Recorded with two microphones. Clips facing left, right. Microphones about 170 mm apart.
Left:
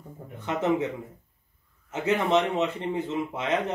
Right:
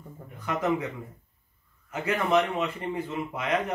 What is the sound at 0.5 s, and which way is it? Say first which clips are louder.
Speech: left 2 dB; 25° left (ahead or behind).